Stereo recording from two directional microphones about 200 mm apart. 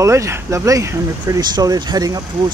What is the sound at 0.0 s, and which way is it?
Speech, 15° right (ahead or behind).